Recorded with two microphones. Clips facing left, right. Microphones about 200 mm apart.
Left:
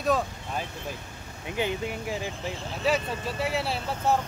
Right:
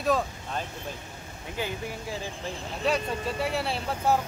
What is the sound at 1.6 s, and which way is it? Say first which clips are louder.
Speech: left 4 dB; 20° left (ahead or behind).